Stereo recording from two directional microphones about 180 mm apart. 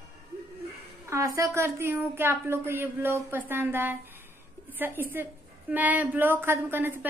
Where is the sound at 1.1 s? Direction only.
15° right (ahead or behind).